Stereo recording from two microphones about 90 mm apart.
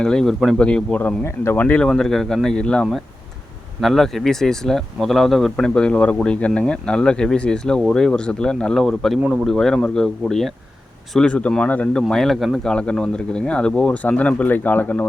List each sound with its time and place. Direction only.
0.0 s speech: 5° left (ahead or behind)
1.2 s speech: 25° left (ahead or behind)
1.6 s speech: 15° left (ahead or behind)
1.9 s speech: 5° left (ahead or behind)
12.0 s speech: centre (ahead or behind)
12.7 s speech: 10° left (ahead or behind)